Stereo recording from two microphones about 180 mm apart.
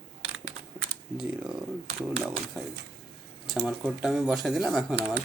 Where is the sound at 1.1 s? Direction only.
5° right (ahead or behind).